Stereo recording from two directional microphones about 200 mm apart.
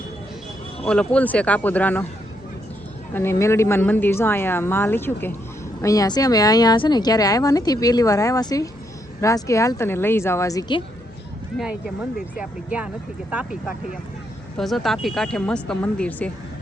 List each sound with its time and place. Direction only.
0.9 s a woman's voice: 5° left (ahead or behind)
3.1 s a woman's voice: 10° left (ahead or behind)
12.1 s speech: 5° right (ahead or behind)